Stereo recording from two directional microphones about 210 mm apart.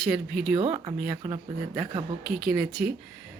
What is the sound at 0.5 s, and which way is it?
Speech, 20° right (ahead or behind).